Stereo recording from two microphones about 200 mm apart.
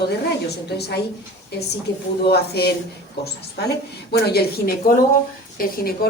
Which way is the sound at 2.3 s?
55° left (ahead or behind).